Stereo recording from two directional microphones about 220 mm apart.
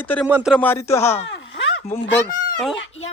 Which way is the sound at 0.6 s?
10° left (ahead or behind).